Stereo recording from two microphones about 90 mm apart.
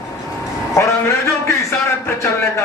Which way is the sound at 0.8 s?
35° left (ahead or behind).